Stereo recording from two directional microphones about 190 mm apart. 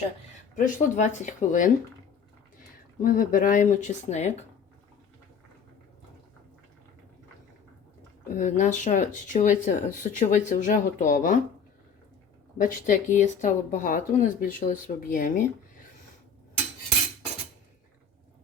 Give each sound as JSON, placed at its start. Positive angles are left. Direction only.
{"t": 0.5, "sound": "speech", "side_deg": 40}
{"t": 3.0, "sound": "speech", "side_deg": 45}
{"t": 8.3, "sound": "speech", "side_deg": 40}
{"t": 12.5, "sound": "speech", "side_deg": 45}